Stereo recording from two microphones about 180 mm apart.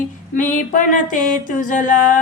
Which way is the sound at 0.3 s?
45° left (ahead or behind).